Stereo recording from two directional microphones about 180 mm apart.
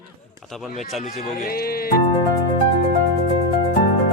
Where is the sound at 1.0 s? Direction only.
45° left (ahead or behind).